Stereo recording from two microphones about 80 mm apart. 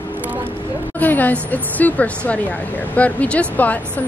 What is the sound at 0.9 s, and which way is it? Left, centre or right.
Speech, left.